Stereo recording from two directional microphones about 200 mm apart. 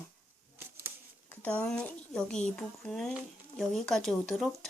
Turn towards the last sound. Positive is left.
turn(degrees=0)  # may be behind; listen again after turning